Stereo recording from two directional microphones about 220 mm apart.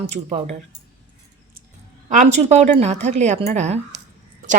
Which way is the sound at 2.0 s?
35° right (ahead or behind).